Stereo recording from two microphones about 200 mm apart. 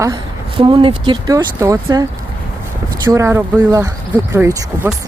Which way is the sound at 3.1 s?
15° right (ahead or behind).